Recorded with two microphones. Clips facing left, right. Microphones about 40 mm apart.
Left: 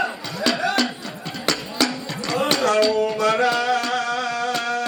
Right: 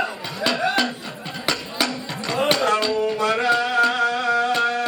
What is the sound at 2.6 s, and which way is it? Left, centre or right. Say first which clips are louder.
Tabla: left 2 dB; right.